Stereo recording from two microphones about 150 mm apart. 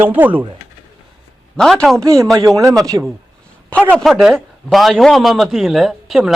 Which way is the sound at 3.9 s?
Centre (ahead or behind).